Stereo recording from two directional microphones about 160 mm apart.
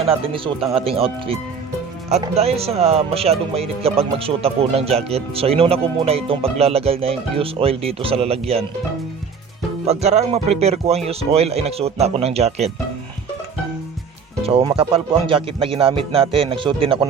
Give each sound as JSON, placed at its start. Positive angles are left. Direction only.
{"t": 0.0, "sound": "speech", "side_deg": -35}
{"t": 9.8, "sound": "speech", "side_deg": -40}
{"t": 14.4, "sound": "speech", "side_deg": -35}